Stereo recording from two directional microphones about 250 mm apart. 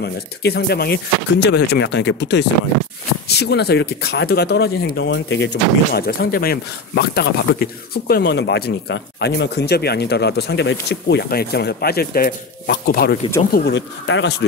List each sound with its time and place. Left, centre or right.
0.0 s speech: left